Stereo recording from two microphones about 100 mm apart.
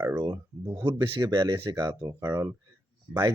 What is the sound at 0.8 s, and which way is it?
Speech, 40° right (ahead or behind).